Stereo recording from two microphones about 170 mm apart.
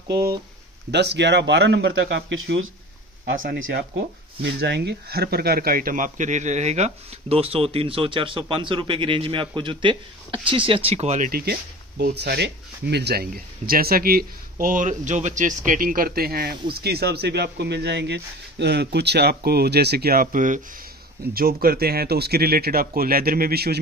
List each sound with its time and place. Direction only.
0.9 s speech: 85° right
3.3 s speech: 70° right (ahead or behind)
12.0 s speech: 80° right; by 20.6 s 50° right (ahead or behind)
21.3 s speech: 60° right (ahead or behind)